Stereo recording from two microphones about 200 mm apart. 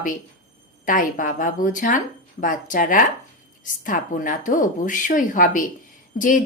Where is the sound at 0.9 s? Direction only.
40° left (ahead or behind).